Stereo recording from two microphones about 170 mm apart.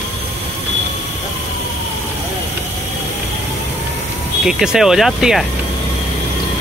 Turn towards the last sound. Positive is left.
turn(degrees=0)  # may be behind; listen again after turning